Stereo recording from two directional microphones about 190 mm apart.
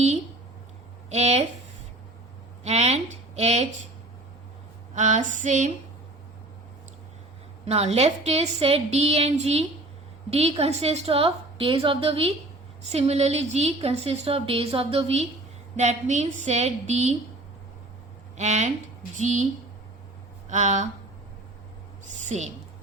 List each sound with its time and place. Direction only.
1.1 s a woman's voice: 35° right (ahead or behind)
2.6 s a woman's voice: 35° right (ahead or behind)
4.9 s a woman's voice: 40° right (ahead or behind)
7.6 s a woman's voice: 35° right (ahead or behind)
18.3 s a woman's voice: 35° right (ahead or behind)
20.5 s a woman's voice: 40° right (ahead or behind)
22.0 s a woman's voice: 40° right (ahead or behind)